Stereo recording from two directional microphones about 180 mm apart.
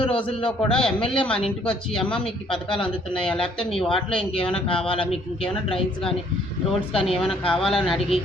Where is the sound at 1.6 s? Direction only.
5° left (ahead or behind).